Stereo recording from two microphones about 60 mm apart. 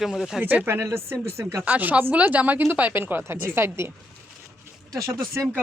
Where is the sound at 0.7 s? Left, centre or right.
Right.